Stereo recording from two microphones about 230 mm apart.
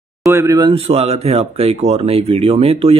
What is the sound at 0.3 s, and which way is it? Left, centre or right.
A man's voice, centre.